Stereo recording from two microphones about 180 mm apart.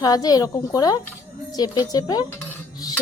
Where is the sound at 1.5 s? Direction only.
20° left (ahead or behind).